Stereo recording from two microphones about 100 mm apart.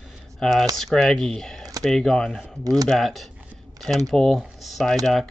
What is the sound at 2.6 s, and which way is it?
Speech, 35° right (ahead or behind).